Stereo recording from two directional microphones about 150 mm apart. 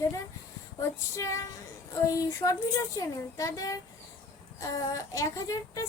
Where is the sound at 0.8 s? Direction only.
20° left (ahead or behind).